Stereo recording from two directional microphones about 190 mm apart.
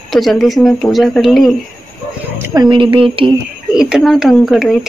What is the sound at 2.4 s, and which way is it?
Speech, 20° right (ahead or behind).